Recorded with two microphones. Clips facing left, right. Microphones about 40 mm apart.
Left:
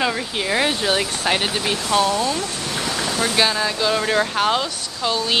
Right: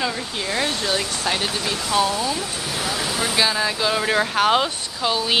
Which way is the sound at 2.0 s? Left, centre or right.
Centre.